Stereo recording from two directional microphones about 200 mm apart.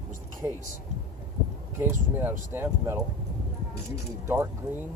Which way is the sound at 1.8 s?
10° right (ahead or behind).